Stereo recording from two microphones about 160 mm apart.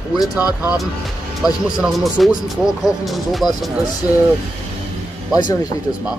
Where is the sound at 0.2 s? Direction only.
25° left (ahead or behind).